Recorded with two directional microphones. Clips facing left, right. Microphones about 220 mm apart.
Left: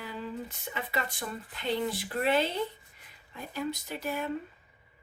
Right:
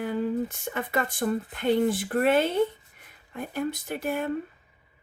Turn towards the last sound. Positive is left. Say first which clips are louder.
# right 5 dB
turn(degrees=-50)  # may be behind; listen again after turning